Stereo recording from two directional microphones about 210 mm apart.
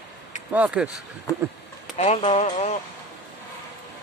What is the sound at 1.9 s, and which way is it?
Speech, 30° left (ahead or behind).